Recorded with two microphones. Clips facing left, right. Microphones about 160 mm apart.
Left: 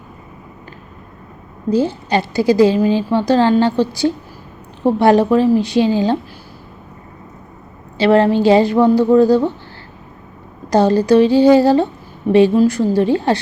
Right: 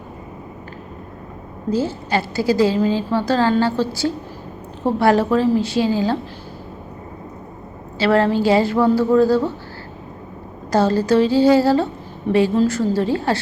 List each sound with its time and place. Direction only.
1.7 s a woman's voice: 15° left (ahead or behind)
7.9 s a woman's voice: 20° left (ahead or behind)
10.7 s a woman's voice: 15° left (ahead or behind)